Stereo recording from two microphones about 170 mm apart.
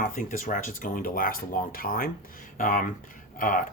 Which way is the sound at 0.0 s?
50° left (ahead or behind).